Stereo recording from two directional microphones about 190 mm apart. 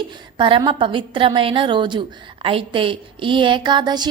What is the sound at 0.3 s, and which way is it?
A woman's voice, 25° right (ahead or behind).